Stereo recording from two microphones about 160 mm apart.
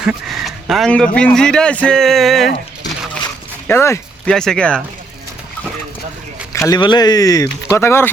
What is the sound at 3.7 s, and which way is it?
Speech, 15° left (ahead or behind).